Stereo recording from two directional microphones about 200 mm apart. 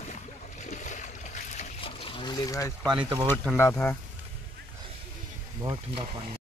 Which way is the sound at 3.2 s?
10° left (ahead or behind).